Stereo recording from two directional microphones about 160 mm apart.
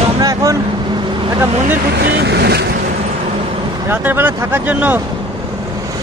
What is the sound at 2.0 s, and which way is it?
Speech, 90° right.